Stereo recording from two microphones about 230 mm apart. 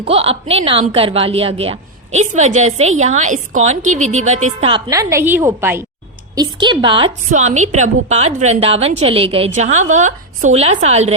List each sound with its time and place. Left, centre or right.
0.0 s a woman's voice: right
4.9 s a woman's voice: centre; by 11.1 s right